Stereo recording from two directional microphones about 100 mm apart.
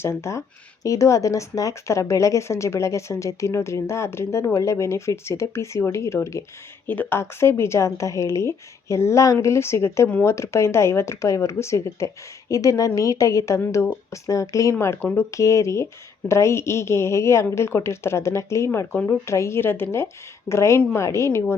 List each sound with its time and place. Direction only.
0.0 s speech: 25° left (ahead or behind)